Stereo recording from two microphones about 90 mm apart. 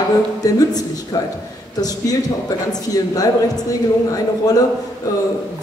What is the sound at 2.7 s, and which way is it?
Speech, 40° left (ahead or behind).